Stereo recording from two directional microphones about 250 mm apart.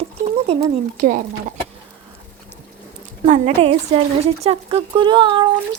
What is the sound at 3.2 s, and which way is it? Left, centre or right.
Speech, right.